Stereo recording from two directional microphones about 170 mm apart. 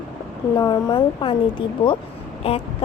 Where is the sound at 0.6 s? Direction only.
25° left (ahead or behind).